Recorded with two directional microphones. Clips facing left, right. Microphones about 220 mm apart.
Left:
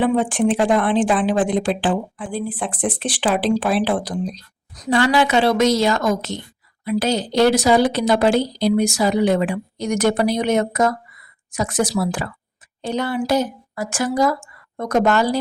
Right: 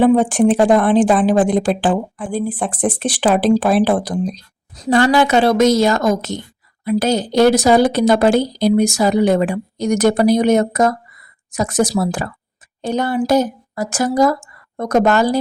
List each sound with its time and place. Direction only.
0.0 s a woman's voice: 40° right (ahead or behind)